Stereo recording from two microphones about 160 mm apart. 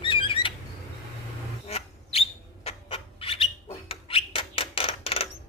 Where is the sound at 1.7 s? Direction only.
40° left (ahead or behind).